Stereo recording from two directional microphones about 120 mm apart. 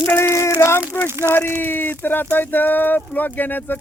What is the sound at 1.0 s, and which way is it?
Speech, 20° right (ahead or behind).